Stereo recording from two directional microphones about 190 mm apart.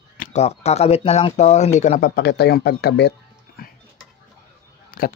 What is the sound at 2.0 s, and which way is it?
Speech, 60° left (ahead or behind).